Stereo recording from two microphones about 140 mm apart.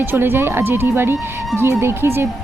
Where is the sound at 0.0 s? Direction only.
15° right (ahead or behind).